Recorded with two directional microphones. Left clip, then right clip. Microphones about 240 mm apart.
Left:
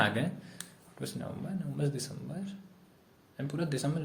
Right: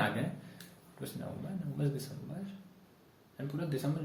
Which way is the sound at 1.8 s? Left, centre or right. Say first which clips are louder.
Left 2 dB; left.